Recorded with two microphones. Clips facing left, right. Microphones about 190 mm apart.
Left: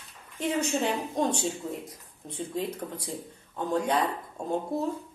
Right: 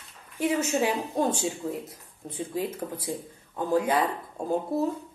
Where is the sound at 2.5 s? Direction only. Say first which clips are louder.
Right 2 dB; 5° right (ahead or behind).